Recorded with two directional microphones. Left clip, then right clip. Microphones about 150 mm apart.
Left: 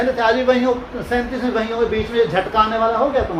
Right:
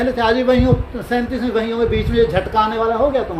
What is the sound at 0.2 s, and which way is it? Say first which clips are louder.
Speech: right 2 dB; 70° right (ahead or behind).